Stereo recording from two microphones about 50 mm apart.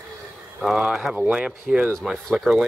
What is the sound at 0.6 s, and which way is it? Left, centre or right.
Speech, centre.